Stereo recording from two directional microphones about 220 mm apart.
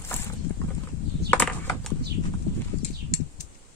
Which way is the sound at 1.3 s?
5° left (ahead or behind).